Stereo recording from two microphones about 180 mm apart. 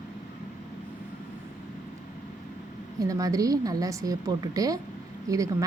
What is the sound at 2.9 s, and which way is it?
A woman's voice, 20° right (ahead or behind).